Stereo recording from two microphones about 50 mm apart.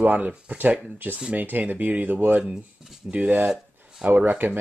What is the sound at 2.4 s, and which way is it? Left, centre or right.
Speech, centre.